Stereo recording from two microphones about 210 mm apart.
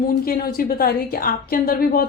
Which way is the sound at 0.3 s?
45° left (ahead or behind).